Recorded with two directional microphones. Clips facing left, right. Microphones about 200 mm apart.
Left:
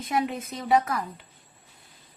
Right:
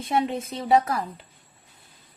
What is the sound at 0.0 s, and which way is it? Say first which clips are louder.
A woman's voice: right 3 dB; 30° right (ahead or behind).